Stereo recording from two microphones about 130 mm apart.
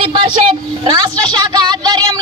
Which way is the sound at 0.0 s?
35° right (ahead or behind).